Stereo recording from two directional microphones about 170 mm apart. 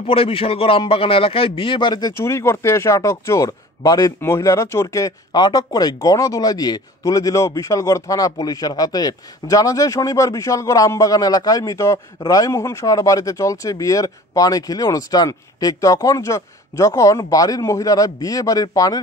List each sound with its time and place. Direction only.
0.0 s a man's voice: 35° left (ahead or behind)